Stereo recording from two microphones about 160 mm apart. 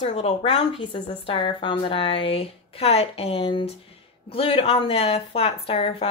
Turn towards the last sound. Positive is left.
turn(degrees=35)  # may be behind; listen again after turning